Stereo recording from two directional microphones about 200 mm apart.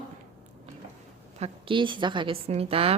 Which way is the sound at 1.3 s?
30° right (ahead or behind).